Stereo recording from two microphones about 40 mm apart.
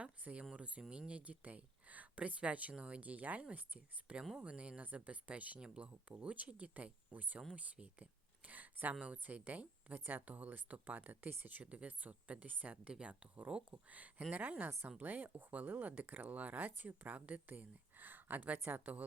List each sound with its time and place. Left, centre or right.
0.0 s speech: right
5.5 s speech: right
11.6 s speech: right
15.0 s speech: right